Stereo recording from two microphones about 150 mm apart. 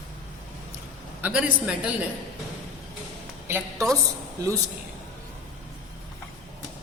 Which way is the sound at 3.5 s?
20° right (ahead or behind).